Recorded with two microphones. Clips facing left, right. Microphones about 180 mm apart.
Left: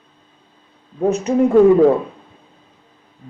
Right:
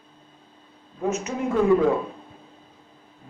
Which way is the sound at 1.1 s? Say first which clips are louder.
Left 9 dB; 35° left (ahead or behind).